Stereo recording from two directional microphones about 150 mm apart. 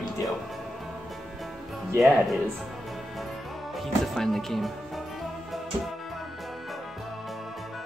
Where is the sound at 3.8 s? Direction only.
Centre (ahead or behind).